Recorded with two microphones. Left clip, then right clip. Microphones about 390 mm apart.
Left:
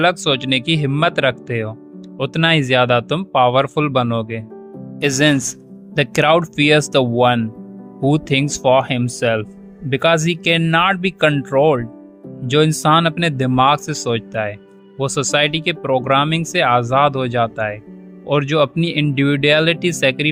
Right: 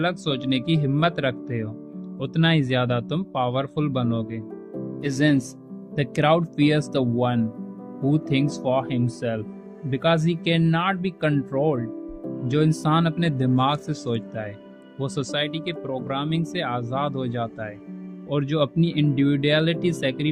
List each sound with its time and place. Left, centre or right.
0.0 s speech: left